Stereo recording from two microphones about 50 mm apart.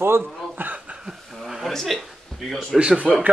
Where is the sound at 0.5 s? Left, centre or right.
Right.